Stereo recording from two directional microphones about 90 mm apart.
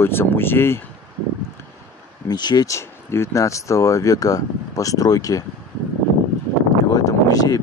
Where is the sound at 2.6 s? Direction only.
30° left (ahead or behind).